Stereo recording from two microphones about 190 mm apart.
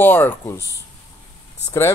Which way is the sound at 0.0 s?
10° left (ahead or behind).